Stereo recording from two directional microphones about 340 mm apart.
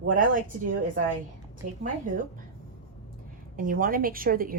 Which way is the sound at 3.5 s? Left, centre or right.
Right.